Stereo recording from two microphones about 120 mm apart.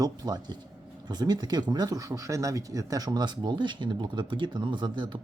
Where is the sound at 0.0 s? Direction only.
35° right (ahead or behind).